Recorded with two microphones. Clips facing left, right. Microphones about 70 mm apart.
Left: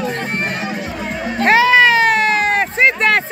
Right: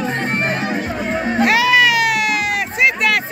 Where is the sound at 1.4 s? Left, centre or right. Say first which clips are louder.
Left 3 dB; left.